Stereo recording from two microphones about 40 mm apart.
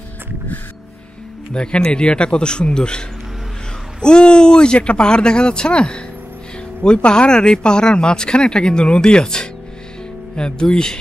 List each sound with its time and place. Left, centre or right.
1.5 s speech: left